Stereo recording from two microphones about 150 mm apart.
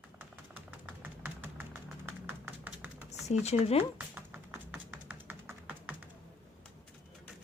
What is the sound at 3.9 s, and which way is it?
Music, 10° right (ahead or behind).